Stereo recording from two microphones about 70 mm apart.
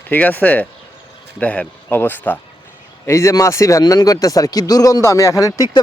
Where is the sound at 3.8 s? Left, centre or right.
Left.